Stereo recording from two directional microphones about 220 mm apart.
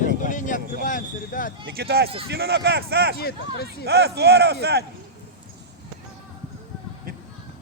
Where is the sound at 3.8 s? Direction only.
50° right (ahead or behind).